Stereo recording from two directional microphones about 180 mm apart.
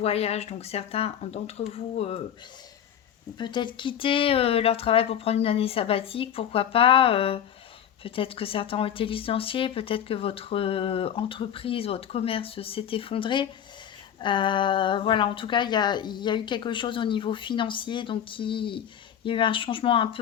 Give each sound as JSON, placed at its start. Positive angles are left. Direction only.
{"t": 0.0, "sound": "speech", "side_deg": 35}
{"t": 3.3, "sound": "speech", "side_deg": 25}